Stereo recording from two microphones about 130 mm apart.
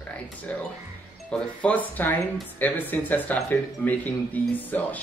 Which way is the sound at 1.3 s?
5° left (ahead or behind).